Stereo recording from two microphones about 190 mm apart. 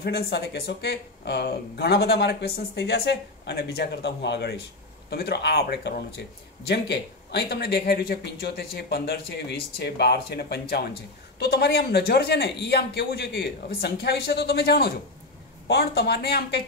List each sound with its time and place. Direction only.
0.0 s speech: 60° left (ahead or behind)